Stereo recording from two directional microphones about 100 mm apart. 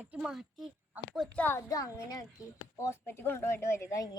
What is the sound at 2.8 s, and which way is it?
Speech, 25° left (ahead or behind).